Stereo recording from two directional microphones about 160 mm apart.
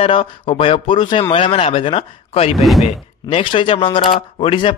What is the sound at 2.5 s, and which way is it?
Speech, centre (ahead or behind).